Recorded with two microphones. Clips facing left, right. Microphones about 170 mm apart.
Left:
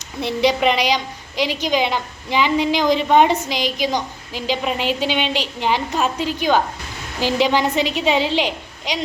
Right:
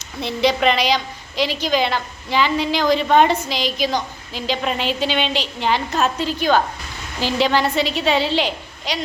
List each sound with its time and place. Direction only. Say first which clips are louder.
0.2 s a woman's voice: left 1 dB; 15° left (ahead or behind)